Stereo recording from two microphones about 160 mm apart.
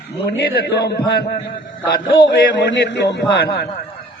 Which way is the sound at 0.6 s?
75° left (ahead or behind).